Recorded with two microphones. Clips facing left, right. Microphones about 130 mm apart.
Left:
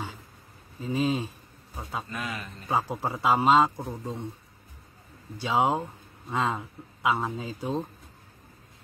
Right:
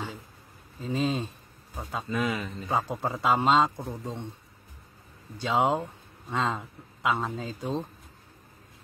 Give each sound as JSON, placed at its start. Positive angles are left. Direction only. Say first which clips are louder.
{"t": 0.7, "sound": "a man's voice", "louder": "left 1 dB", "side_deg": 5}
{"t": 5.4, "sound": "a man's voice", "louder": "even", "side_deg": 10}